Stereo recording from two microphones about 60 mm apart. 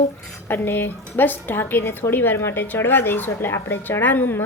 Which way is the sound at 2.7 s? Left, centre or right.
Left.